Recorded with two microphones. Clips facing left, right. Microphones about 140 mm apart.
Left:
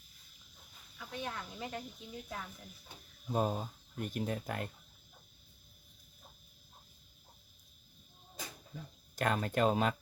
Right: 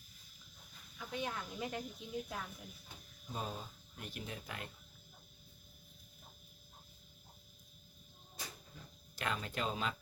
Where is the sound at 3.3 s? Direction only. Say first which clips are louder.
Left 10 dB; 50° left (ahead or behind).